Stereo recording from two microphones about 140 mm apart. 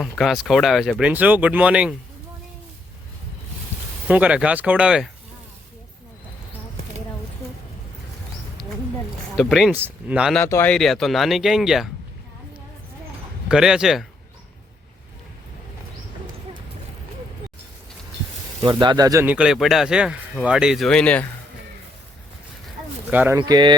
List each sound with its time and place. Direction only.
0.0 s speech: centre (ahead or behind)
4.1 s speech: 10° right (ahead or behind)
9.3 s speech: centre (ahead or behind)
9.7 s speech: 15° right (ahead or behind)
10.3 s speech: 15° left (ahead or behind)
10.8 s speech: centre (ahead or behind)
13.5 s speech: 5° right (ahead or behind)
18.6 s speech: 35° right (ahead or behind)
19.2 s speech: 10° right (ahead or behind); by 21.2 s 10° left (ahead or behind)
23.0 s speech: 15° right (ahead or behind)
23.4 s speech: 35° right (ahead or behind)